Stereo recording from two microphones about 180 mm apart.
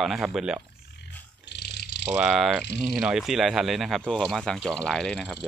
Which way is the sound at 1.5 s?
65° left (ahead or behind).